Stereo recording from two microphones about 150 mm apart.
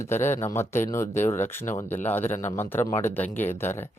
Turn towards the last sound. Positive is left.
turn(degrees=15)  # may be behind; listen again after turning